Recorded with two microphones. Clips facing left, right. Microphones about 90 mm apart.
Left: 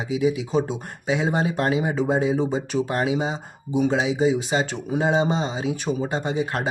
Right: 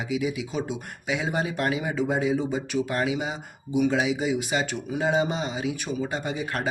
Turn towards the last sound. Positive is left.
turn(degrees=25)  # may be behind; listen again after turning